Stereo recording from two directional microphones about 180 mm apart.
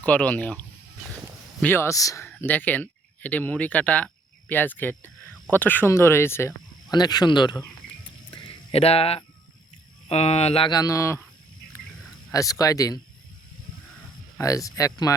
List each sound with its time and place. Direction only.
0.0 s speech: 10° left (ahead or behind)
1.6 s speech: 15° left (ahead or behind)
8.3 s a sound: 30° left (ahead or behind)
10.1 s speech: 35° left (ahead or behind); by 11.3 s 15° left (ahead or behind)
12.3 s speech: 20° left (ahead or behind)
14.3 s speech: 20° left (ahead or behind)